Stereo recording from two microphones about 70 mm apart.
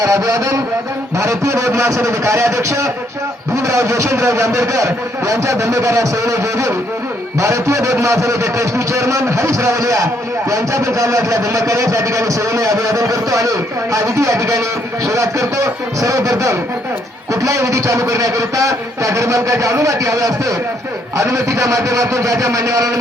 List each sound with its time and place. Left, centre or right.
0.0 s a man's voice: right